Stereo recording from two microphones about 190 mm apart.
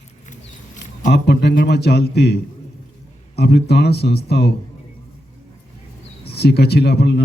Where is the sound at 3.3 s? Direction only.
60° left (ahead or behind).